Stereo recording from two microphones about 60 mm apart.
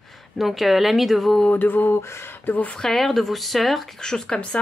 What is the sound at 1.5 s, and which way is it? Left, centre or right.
A woman's voice, left.